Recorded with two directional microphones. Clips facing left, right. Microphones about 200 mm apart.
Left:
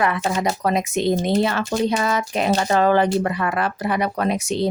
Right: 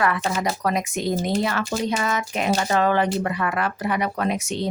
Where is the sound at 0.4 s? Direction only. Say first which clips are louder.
Left 3 dB; 25° left (ahead or behind).